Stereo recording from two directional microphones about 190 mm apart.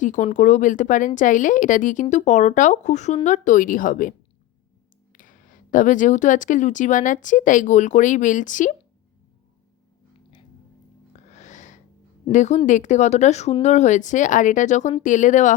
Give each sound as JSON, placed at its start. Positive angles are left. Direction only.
{"t": 0.0, "sound": "speech", "side_deg": 40}
{"t": 5.1, "sound": "speech", "side_deg": 45}
{"t": 11.3, "sound": "a sound", "side_deg": 40}
{"t": 12.3, "sound": "speech", "side_deg": 40}